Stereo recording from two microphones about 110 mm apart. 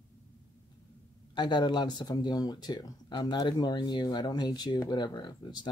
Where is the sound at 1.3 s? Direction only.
40° left (ahead or behind).